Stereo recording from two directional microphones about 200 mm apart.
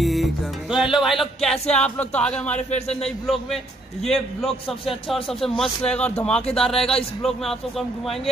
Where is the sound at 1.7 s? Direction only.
5° left (ahead or behind).